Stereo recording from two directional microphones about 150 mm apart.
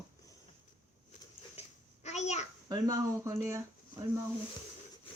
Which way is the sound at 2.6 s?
20° right (ahead or behind).